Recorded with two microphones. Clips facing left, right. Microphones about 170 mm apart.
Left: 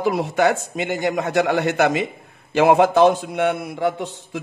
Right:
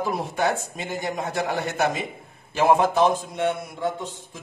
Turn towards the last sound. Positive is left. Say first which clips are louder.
# left 6 dB
turn(degrees=70)  # may be behind; listen again after turning